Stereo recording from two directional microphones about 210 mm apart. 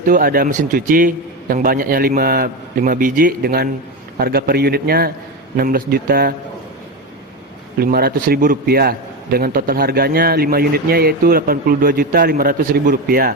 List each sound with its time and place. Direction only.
0.0 s a man's voice: 40° right (ahead or behind)
7.8 s a man's voice: 45° right (ahead or behind)